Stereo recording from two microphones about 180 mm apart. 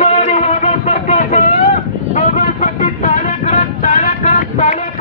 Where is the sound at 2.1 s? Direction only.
45° left (ahead or behind).